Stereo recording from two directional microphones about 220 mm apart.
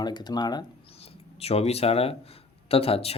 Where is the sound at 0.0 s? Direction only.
20° left (ahead or behind).